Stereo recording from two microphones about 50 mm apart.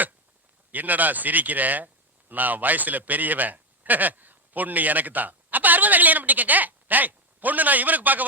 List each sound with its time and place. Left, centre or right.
0.7 s a man's voice: right